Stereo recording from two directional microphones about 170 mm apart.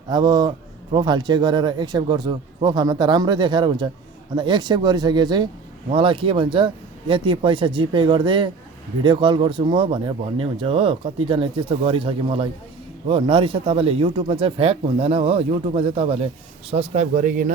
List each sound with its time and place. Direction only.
0.1 s speech: 25° right (ahead or behind)
16.7 s speech: 45° right (ahead or behind)